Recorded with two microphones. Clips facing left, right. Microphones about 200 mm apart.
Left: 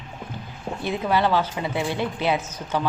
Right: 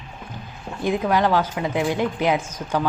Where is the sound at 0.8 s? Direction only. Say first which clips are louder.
Right 3 dB; 15° right (ahead or behind).